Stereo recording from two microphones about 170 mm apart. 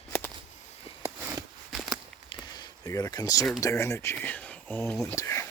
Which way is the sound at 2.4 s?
25° left (ahead or behind).